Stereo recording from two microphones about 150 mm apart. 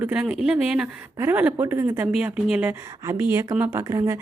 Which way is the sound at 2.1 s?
5° right (ahead or behind).